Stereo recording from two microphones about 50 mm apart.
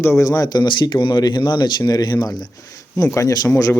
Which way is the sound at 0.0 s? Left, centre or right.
Left.